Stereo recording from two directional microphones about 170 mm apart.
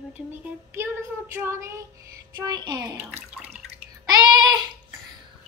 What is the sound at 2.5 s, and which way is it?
Speech, 25° right (ahead or behind).